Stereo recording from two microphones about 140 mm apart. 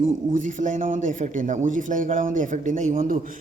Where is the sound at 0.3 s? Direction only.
65° right (ahead or behind).